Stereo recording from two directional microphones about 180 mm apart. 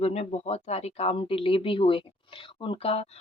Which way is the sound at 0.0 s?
35° left (ahead or behind).